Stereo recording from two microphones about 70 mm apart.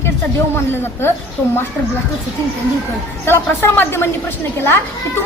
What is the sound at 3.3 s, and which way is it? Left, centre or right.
Speech, left.